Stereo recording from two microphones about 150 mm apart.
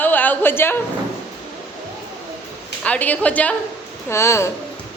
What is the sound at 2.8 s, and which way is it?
A woman's voice, 10° left (ahead or behind).